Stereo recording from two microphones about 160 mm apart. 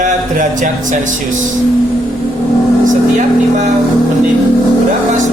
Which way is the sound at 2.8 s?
50° right (ahead or behind).